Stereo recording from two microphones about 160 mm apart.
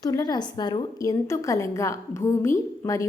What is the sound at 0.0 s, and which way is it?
A woman's voice, 25° left (ahead or behind).